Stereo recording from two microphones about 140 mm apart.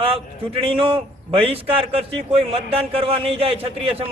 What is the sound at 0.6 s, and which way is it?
A man's voice, 40° right (ahead or behind).